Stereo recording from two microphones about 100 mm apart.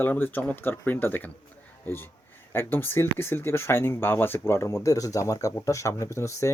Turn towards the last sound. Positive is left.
turn(degrees=30)  # may be behind; listen again after turning